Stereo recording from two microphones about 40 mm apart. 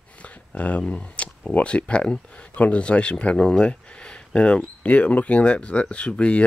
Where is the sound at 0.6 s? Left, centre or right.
Left.